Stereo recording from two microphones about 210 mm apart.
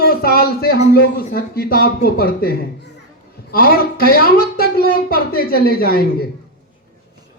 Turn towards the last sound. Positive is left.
turn(degrees=45)  # may be behind; listen again after turning